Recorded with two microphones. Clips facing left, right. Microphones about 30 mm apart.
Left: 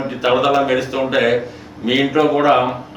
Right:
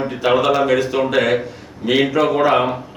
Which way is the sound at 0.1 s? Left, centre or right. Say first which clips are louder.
Left 2 dB; centre.